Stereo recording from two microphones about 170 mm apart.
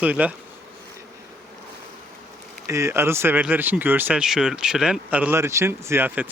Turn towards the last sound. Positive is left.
turn(degrees=-10)  # may be behind; listen again after turning